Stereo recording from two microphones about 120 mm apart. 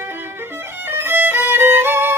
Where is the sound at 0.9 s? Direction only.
20° right (ahead or behind).